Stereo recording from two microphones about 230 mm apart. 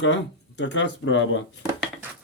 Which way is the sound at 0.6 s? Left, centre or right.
Left.